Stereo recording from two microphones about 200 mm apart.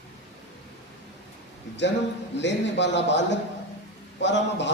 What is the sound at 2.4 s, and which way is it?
A man's voice, 60° left (ahead or behind).